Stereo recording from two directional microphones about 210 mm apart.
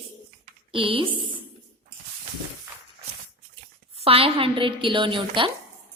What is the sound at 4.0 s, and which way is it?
A woman's voice, 25° right (ahead or behind).